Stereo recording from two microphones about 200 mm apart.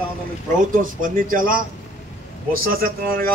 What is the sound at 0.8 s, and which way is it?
Speech, 45° right (ahead or behind).